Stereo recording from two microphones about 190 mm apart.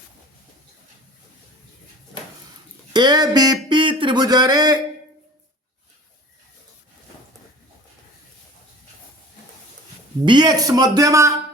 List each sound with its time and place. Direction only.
2.9 s speech: 20° right (ahead or behind)
10.2 s speech: 20° right (ahead or behind)